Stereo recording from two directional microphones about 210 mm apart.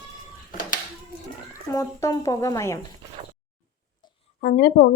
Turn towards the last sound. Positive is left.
turn(degrees=45)  # may be behind; listen again after turning